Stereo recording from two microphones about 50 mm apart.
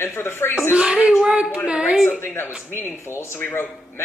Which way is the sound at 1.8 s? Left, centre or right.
Centre.